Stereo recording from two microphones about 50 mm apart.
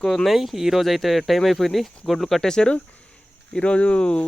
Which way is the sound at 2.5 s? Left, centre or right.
Centre.